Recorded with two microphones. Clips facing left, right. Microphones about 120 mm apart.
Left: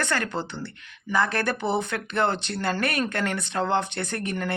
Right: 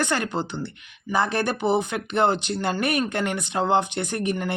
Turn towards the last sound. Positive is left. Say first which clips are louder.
# right 4 dB
turn(degrees=-15)  # may be behind; listen again after turning